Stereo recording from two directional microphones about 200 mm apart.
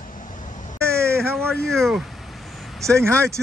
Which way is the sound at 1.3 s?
5° left (ahead or behind).